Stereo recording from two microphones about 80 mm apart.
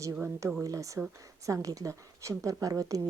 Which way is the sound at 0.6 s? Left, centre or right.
Right.